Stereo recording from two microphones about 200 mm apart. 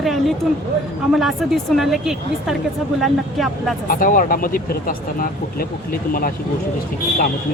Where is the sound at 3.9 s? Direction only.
45° left (ahead or behind).